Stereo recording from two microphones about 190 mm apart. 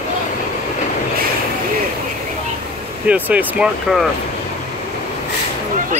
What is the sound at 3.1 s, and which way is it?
Speech, 10° right (ahead or behind).